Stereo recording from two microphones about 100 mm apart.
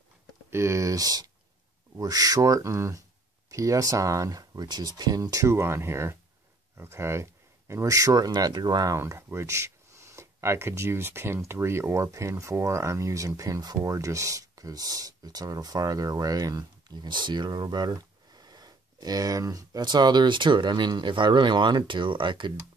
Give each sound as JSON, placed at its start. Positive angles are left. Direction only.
{"t": 0.5, "sound": "speech", "side_deg": -30}
{"t": 8.9, "sound": "speech", "side_deg": -30}